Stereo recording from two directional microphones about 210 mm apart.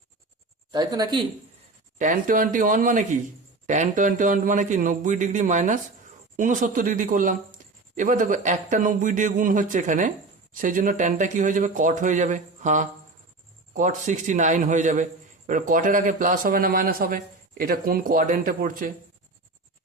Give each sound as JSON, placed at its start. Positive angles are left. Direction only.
{"t": 0.7, "sound": "speech", "side_deg": -20}
{"t": 2.0, "sound": "a man's voice", "side_deg": -40}